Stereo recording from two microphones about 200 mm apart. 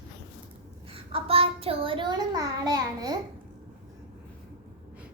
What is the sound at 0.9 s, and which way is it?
A child's voice, 30° right (ahead or behind).